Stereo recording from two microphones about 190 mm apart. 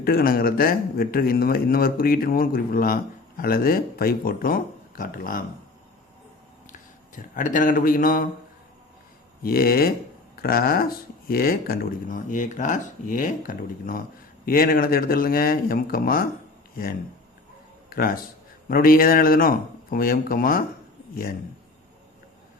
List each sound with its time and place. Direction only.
0.0 s a man's voice: 50° left (ahead or behind)
7.2 s a man's voice: 45° left (ahead or behind)
9.4 s a man's voice: 50° left (ahead or behind)
17.8 s a man's voice: 50° left (ahead or behind)